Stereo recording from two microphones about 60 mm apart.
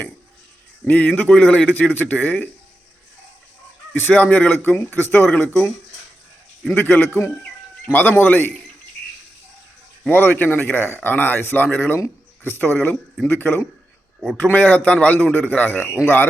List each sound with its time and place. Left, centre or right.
0.9 s a man's voice: left
3.9 s a man's voice: left
6.7 s a man's voice: left
10.1 s a man's voice: left
15.8 s a man's voice: centre